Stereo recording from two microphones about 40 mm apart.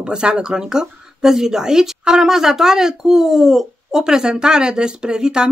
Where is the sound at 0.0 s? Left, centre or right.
Right.